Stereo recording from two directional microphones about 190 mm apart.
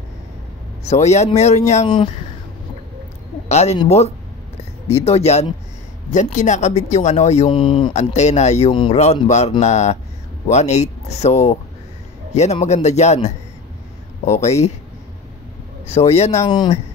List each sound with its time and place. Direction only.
0.8 s speech: 35° left (ahead or behind)
3.4 s speech: 35° left (ahead or behind)
15.9 s speech: 35° left (ahead or behind)